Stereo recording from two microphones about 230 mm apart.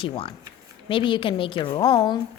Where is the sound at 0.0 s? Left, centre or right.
Left.